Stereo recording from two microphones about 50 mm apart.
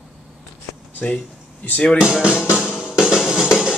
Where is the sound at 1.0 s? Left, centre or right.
Left.